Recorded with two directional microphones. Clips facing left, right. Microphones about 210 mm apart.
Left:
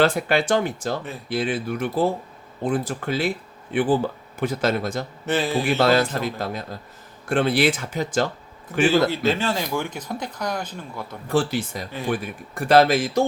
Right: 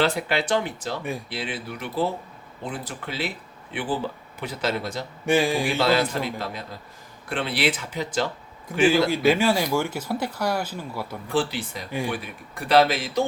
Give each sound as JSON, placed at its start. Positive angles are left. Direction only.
{"t": 0.0, "sound": "speech", "side_deg": 50}
{"t": 5.2, "sound": "speech", "side_deg": -10}
{"t": 5.7, "sound": "speech", "side_deg": 45}
{"t": 9.0, "sound": "speech", "side_deg": -10}
{"t": 11.3, "sound": "speech", "side_deg": 45}